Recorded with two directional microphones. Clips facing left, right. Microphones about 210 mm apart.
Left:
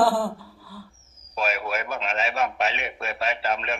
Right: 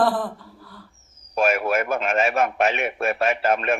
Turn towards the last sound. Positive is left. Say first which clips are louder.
# right 6 dB
turn(degrees=-50)  # may be behind; listen again after turning